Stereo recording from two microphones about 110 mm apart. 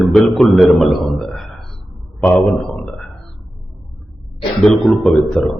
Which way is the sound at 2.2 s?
15° left (ahead or behind).